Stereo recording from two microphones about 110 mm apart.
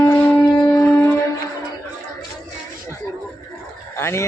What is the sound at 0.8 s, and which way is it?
Music, 20° left (ahead or behind).